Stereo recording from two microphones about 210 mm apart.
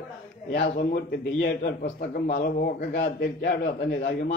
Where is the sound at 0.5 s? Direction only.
45° left (ahead or behind).